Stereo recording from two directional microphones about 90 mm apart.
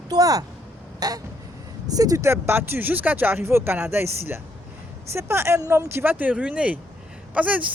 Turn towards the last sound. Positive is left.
turn(degrees=-15)  # may be behind; listen again after turning